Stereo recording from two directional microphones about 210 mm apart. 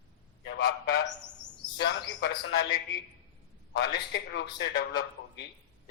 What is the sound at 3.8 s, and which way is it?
Speech, 55° left (ahead or behind).